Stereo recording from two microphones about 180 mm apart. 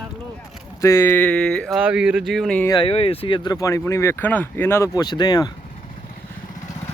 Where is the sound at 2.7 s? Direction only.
30° left (ahead or behind).